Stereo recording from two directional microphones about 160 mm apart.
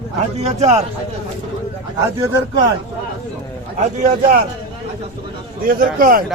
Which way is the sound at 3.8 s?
50° right (ahead or behind).